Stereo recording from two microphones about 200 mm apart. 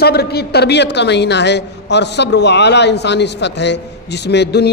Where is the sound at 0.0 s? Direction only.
55° left (ahead or behind).